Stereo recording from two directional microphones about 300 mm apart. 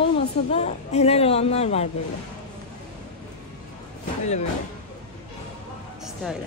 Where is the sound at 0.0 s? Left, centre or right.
Left.